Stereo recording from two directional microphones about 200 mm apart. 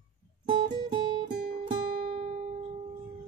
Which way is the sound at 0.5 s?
20° right (ahead or behind).